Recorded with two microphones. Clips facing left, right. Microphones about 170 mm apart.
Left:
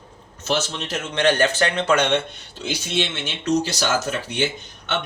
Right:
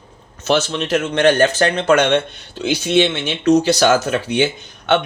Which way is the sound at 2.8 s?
70° right (ahead or behind).